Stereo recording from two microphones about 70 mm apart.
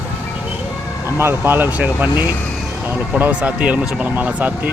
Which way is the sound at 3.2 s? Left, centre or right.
Right.